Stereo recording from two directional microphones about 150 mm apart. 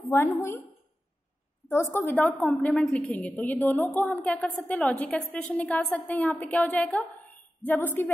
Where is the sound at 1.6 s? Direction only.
15° left (ahead or behind).